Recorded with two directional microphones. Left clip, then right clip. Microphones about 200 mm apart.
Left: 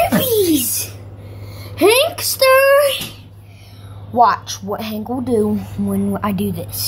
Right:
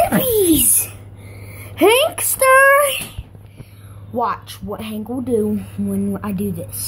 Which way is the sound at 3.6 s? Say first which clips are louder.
Left 6 dB; 5° right (ahead or behind).